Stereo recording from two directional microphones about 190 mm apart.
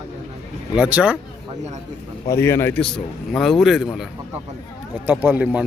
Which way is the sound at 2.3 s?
15° left (ahead or behind).